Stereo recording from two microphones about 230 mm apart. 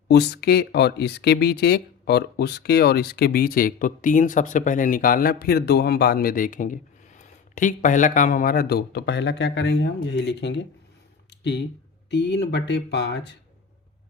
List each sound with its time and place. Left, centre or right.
0.1 s speech: left
11.3 s a sound: left
12.1 s speech: left